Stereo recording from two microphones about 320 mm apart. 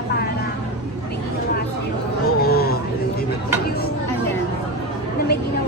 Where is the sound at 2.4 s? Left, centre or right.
Left.